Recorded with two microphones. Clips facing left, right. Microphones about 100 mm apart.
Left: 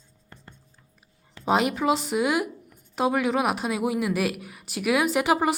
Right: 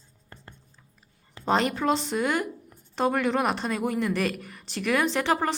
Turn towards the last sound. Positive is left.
turn(degrees=10)  # may be behind; listen again after turning